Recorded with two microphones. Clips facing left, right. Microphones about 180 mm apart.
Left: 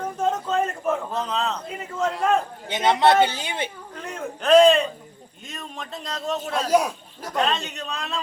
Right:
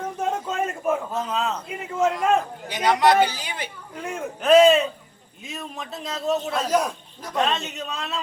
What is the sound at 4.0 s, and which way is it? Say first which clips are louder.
A man's voice: right 2 dB; 5° right (ahead or behind).